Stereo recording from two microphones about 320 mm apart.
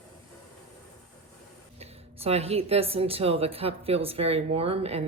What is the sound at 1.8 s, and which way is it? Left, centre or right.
Speech, centre.